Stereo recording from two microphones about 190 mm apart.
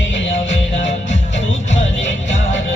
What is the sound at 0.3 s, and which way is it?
Music, 75° left (ahead or behind).